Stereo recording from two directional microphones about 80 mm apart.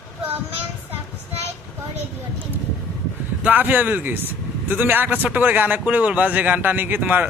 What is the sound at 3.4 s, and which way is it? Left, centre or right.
A man's voice, right.